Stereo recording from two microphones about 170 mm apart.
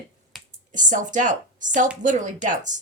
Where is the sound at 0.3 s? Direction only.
Centre (ahead or behind).